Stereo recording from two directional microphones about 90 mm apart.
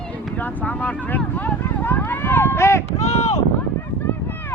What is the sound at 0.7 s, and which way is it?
Speech, 15° left (ahead or behind).